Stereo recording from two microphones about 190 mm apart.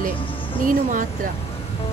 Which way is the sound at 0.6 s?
45° right (ahead or behind).